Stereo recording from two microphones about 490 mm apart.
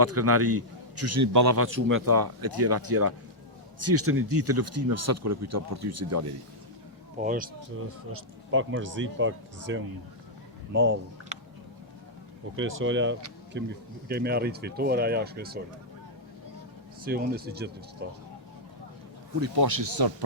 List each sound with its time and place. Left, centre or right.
0.0 s a man's voice: right
7.2 s a man's voice: centre
12.5 s a man's voice: right
17.0 s a man's voice: centre
19.4 s speech: right